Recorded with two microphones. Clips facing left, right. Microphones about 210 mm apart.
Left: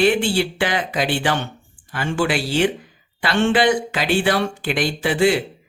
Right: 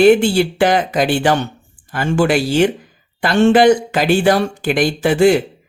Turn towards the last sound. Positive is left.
turn(degrees=-45)  # may be behind; listen again after turning